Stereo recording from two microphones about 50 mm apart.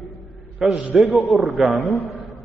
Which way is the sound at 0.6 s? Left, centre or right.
Centre.